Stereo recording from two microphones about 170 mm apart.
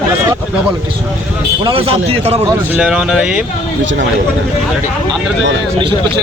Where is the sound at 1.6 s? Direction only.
35° right (ahead or behind).